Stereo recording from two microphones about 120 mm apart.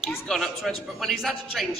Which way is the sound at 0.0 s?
Centre (ahead or behind).